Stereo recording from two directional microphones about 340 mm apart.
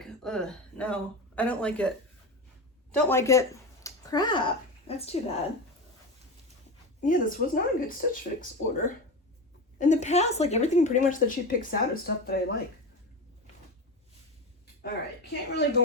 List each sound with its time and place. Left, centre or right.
0.0 s speech: centre
2.9 s speech: centre
7.0 s a woman's voice: left
14.8 s a woman's voice: left